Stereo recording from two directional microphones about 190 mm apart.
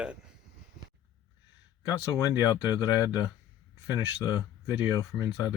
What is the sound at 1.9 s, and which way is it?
Speech, 20° left (ahead or behind).